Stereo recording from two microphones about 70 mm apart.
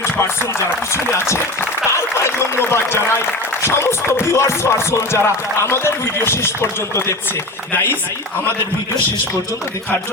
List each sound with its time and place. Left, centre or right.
0.9 s music: left